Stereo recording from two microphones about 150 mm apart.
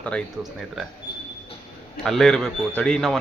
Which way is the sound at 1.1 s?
35° left (ahead or behind).